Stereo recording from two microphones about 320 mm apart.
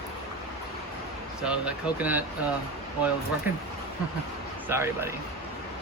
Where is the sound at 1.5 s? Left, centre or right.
Centre.